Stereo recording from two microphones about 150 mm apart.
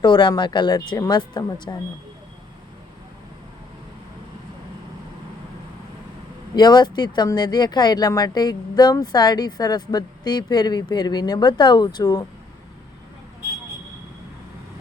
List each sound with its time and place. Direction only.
0.0 s speech: 30° left (ahead or behind)
6.6 s speech: 30° left (ahead or behind)